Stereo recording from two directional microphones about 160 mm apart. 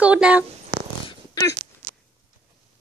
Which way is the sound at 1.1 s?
20° left (ahead or behind).